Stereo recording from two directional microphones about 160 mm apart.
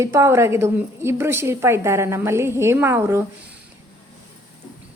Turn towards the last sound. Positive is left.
turn(degrees=-15)  # may be behind; listen again after turning